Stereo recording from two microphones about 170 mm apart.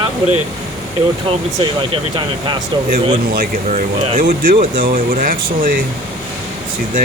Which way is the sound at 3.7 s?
45° right (ahead or behind).